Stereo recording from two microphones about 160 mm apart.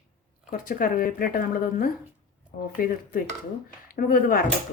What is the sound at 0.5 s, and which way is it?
Speech, 60° left (ahead or behind).